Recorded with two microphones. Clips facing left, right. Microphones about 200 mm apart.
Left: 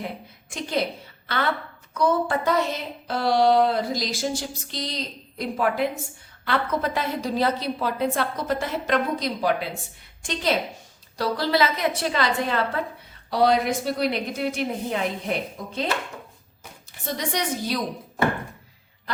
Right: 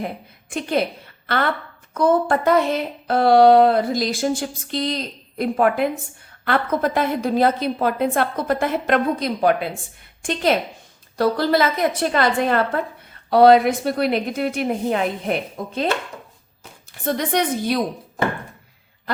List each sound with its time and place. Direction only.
1.9 s a woman's voice: 50° right (ahead or behind)
17.1 s speech: 55° right (ahead or behind)